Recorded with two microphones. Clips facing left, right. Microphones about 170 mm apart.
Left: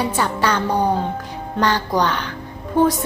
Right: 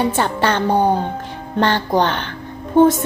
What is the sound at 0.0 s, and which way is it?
A woman's voice, 25° right (ahead or behind).